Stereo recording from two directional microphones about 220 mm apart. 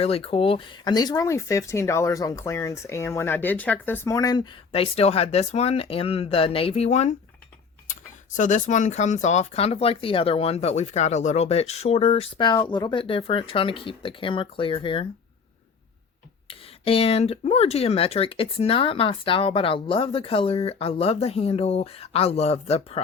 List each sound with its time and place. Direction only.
0.0 s speech: 25° left (ahead or behind)
16.5 s speech: 25° left (ahead or behind)